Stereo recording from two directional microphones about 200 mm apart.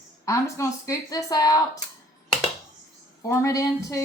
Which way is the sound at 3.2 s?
15° left (ahead or behind).